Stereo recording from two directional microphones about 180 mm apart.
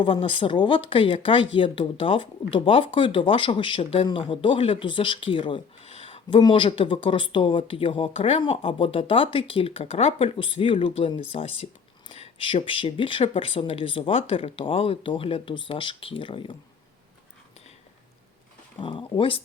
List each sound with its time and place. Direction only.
0.0 s speech: 30° left (ahead or behind)
18.8 s speech: 25° left (ahead or behind)